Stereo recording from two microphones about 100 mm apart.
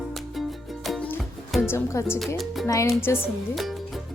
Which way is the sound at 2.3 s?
Centre (ahead or behind).